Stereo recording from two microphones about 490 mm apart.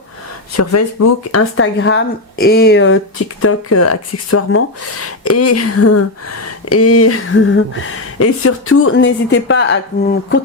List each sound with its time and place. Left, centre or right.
0.5 s speech: left